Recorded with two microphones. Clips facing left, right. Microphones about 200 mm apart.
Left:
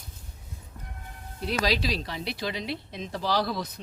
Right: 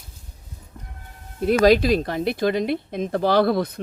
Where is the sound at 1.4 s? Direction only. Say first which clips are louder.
Right 12 dB; 50° right (ahead or behind).